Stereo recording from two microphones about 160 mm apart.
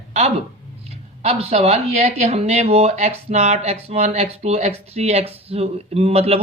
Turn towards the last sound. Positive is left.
turn(degrees=-40)  # may be behind; listen again after turning